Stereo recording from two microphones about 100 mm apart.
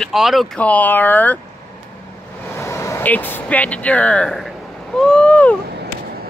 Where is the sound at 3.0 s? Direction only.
20° left (ahead or behind).